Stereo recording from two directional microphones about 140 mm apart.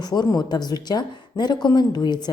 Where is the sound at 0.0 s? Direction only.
30° left (ahead or behind).